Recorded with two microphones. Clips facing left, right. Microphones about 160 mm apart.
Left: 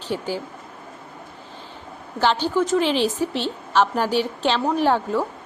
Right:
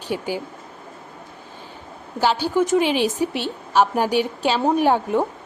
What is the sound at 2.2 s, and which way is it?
A woman's voice, 10° right (ahead or behind).